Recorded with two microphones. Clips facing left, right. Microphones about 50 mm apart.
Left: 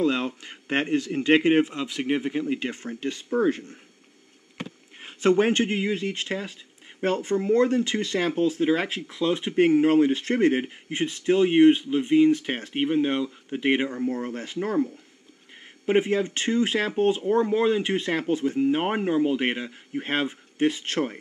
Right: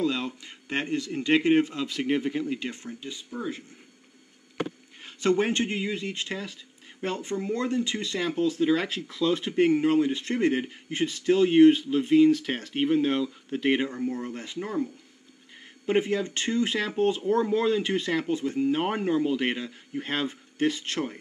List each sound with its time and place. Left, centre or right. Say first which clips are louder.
0.0 s speech: left 4 dB; left
1.8 s speech: left 1 dB; centre
2.4 s speech: left 3 dB; left
3.0 s speech: left 15 dB; left
5.4 s speech: left 4 dB; left; by 9.6 s centre
9.6 s speech: left 4 dB; left
10.9 s speech: left 1 dB; centre
14.1 s speech: left 3 dB; left
15.8 s speech: left 3 dB; left